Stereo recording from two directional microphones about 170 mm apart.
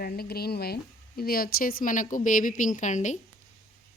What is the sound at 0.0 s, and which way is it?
Speech, 65° left (ahead or behind).